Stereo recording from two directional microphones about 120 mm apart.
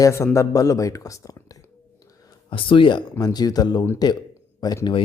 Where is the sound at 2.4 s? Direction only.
45° left (ahead or behind).